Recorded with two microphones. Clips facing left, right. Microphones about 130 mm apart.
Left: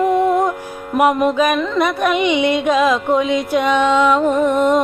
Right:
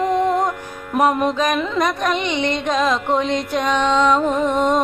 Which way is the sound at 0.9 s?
10° left (ahead or behind).